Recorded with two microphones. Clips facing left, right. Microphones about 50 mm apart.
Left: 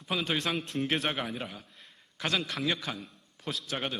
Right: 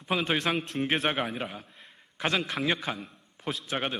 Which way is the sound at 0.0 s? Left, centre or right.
Right.